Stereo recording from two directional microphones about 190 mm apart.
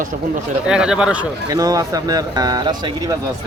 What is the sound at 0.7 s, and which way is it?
Speech, 5° right (ahead or behind).